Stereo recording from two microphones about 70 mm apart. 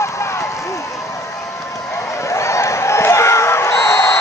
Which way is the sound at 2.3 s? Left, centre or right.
Left.